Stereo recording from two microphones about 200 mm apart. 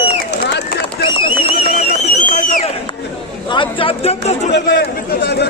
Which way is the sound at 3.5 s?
25° left (ahead or behind).